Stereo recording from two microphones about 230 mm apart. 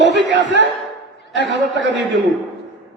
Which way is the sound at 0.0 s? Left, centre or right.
Right.